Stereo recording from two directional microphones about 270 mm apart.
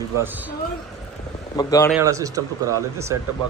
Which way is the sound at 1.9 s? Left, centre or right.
Centre.